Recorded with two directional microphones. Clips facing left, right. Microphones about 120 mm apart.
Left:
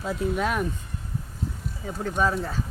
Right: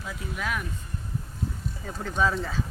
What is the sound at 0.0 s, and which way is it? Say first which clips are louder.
Speech: left 8 dB; 30° left (ahead or behind).